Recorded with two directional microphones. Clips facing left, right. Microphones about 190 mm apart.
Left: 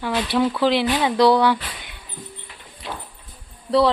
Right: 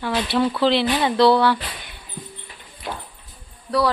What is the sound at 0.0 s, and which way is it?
Speech, 10° left (ahead or behind).